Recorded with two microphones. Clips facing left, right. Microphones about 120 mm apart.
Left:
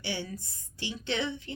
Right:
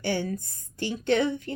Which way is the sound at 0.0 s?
45° right (ahead or behind).